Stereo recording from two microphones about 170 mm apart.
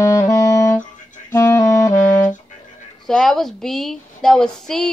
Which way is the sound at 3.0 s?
5° left (ahead or behind).